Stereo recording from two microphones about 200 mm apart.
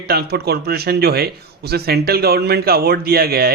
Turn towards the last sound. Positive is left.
turn(degrees=-50)  # may be behind; listen again after turning